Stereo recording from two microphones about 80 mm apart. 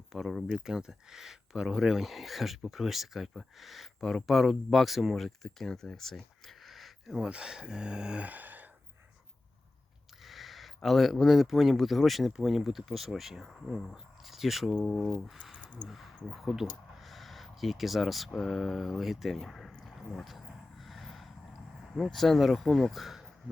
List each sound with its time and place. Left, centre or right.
0.1 s speech: centre
7.3 s speech: centre
10.2 s speech: centre
15.5 s a sound: centre
15.9 s a sound: centre
21.9 s speech: centre